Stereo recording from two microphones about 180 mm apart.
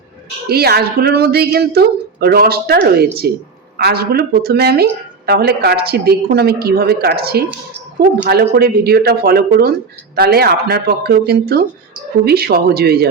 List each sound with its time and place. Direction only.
0.4 s a woman's voice: 60° right (ahead or behind)